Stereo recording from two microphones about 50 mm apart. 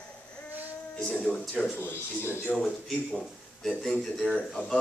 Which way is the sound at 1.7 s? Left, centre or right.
Left.